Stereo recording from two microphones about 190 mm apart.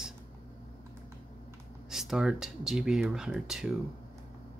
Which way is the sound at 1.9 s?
Centre (ahead or behind).